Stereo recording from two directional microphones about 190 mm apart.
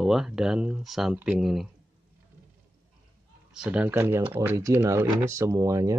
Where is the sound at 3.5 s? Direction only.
5° right (ahead or behind).